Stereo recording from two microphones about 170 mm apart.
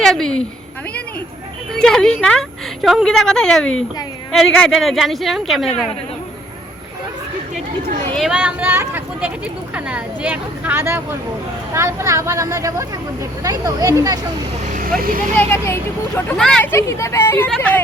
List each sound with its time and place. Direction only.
0.0 s speech: 5° left (ahead or behind)
1.7 s speech: 5° left (ahead or behind)
8.1 s speech: 5° right (ahead or behind); by 14.2 s 20° right (ahead or behind)
14.7 s vehicle: 50° right (ahead or behind)
15.4 s speech: 15° left (ahead or behind)
16.4 s speech: 5° left (ahead or behind)
16.7 s speech: 15° left (ahead or behind)